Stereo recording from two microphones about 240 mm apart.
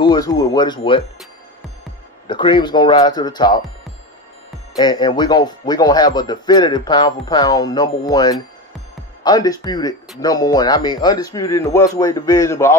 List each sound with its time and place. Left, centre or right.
0.0 s speech: centre
2.2 s speech: centre
4.7 s speech: centre